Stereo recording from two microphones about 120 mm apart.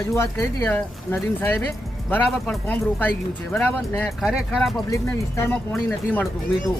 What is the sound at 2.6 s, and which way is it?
Speech, 15° left (ahead or behind).